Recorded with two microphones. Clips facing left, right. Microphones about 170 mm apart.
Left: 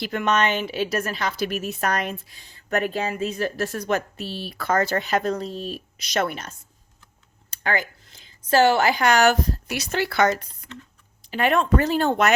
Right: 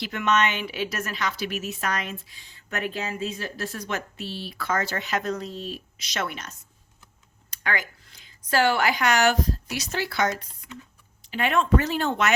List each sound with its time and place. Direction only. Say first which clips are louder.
0.0 s a woman's voice: left 2 dB; 35° left (ahead or behind)
3.3 s speech: left 7 dB; 55° left (ahead or behind); by 5.5 s 30° left (ahead or behind)
6.1 s a woman's voice: left 6 dB; 45° left (ahead or behind)
7.5 s a sound: left 4 dB; 30° left (ahead or behind)
8.4 s a woman's voice: left 4 dB; 25° left (ahead or behind)
9.2 s speech: left 3 dB; 55° left (ahead or behind)
10.7 s speech: left 1 dB; 10° right (ahead or behind)
11.3 s a woman's voice: left 2 dB; 40° left (ahead or behind)